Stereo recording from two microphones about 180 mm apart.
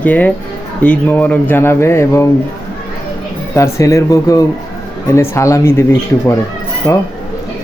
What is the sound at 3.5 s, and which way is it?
A man's voice, 15° left (ahead or behind).